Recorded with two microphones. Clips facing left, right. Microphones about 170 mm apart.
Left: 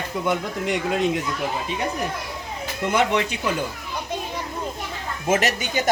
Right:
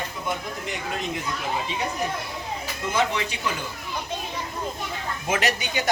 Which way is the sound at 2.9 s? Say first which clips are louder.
Left 4 dB; 60° left (ahead or behind).